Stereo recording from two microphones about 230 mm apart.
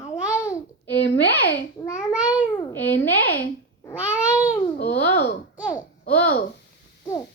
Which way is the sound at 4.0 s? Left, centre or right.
Centre.